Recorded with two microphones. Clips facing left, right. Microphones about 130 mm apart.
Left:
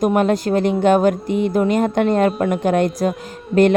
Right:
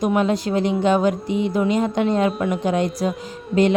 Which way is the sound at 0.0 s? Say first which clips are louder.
Left 3 dB; 50° left (ahead or behind).